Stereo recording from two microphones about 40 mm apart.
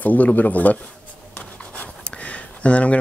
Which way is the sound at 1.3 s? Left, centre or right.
Left.